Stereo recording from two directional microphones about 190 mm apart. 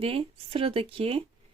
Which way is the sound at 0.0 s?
30° right (ahead or behind).